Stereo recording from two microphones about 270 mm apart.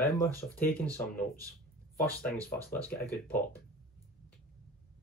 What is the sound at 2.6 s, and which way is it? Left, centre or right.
Speech, centre.